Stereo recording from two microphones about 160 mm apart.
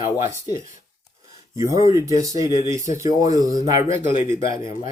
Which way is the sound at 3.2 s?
20° right (ahead or behind).